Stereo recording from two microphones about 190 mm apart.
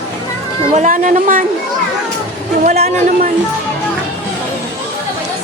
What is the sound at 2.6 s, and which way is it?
Speech, 40° right (ahead or behind).